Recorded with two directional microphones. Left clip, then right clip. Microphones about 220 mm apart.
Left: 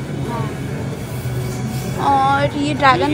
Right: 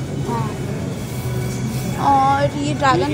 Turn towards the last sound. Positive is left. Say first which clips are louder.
# left 3 dB
turn(degrees=-10)  # may be behind; listen again after turning